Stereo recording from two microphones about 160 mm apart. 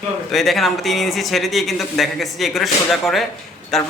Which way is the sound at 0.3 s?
Centre (ahead or behind).